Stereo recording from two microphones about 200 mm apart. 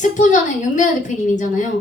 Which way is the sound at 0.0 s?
40° left (ahead or behind).